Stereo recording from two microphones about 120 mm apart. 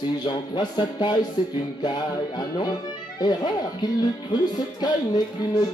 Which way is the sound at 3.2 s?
40° left (ahead or behind).